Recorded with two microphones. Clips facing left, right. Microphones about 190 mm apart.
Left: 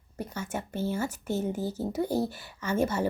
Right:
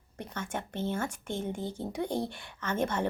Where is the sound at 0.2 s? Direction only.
5° left (ahead or behind).